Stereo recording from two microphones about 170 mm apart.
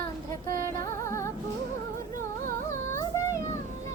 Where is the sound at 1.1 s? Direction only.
15° left (ahead or behind).